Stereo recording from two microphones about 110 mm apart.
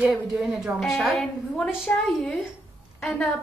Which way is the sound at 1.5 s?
10° left (ahead or behind).